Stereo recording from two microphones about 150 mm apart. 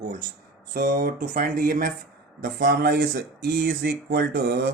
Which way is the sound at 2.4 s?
90° right.